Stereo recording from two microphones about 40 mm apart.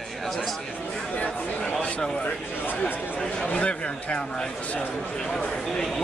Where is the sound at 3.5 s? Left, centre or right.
Left.